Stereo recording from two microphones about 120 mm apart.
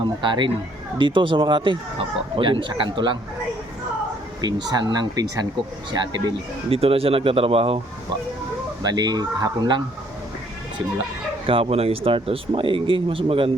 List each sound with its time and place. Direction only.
0.0 s speech: 40° right (ahead or behind)
4.4 s speech: 35° right (ahead or behind)
6.7 s speech: 55° right (ahead or behind)
8.8 s speech: 35° right (ahead or behind)
11.4 s speech: 50° right (ahead or behind)